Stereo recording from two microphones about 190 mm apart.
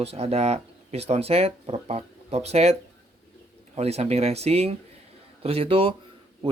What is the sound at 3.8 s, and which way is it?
Speech, 35° right (ahead or behind).